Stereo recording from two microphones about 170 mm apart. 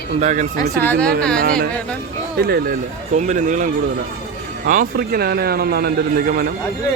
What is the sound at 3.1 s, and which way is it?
A man's voice, 45° right (ahead or behind).